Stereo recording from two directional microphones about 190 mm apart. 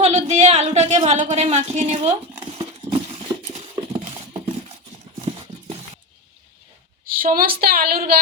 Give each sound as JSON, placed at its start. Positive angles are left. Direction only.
{"t": 0.0, "sound": "a sound", "side_deg": -35}
{"t": 3.4, "sound": "clip-clop", "side_deg": -35}
{"t": 7.0, "sound": "a woman's voice", "side_deg": -45}